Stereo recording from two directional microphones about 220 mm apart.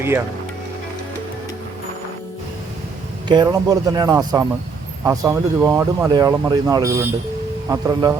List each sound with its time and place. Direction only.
3.2 s speech: 15° right (ahead or behind)